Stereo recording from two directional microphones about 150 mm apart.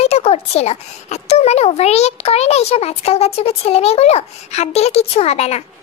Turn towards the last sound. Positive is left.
turn(degrees=45)  # may be behind; listen again after turning